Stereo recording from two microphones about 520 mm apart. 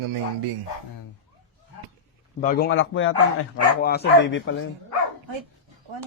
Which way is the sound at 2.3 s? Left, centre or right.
Centre.